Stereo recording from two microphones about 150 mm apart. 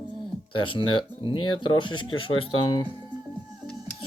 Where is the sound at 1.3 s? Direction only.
35° left (ahead or behind).